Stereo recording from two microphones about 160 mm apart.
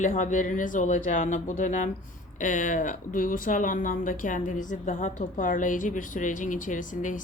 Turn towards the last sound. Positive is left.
turn(degrees=55)  # may be behind; listen again after turning